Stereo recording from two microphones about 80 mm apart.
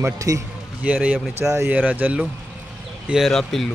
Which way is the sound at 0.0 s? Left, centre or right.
Right.